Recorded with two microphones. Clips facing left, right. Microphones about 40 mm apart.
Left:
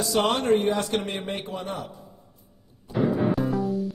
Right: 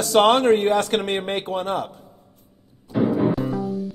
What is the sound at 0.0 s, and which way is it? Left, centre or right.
Speech, right.